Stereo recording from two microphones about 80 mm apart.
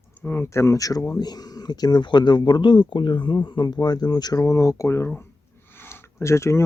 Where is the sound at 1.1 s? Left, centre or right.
Left.